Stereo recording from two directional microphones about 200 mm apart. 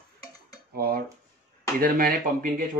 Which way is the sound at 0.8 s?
50° right (ahead or behind).